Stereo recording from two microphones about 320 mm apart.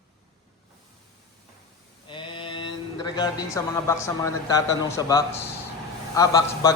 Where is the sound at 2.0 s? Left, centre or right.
Centre.